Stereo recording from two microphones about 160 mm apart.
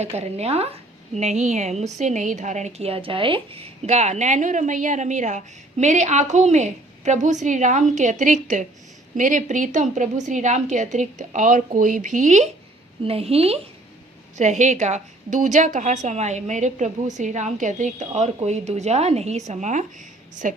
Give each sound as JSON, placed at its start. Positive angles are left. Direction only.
{"t": 0.0, "sound": "a woman's voice", "side_deg": -40}
{"t": 13.1, "sound": "a woman's voice", "side_deg": -40}